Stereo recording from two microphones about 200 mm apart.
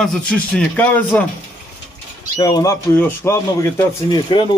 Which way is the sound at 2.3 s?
20° left (ahead or behind).